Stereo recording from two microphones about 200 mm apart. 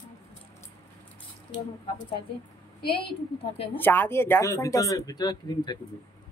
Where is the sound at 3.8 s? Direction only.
10° left (ahead or behind).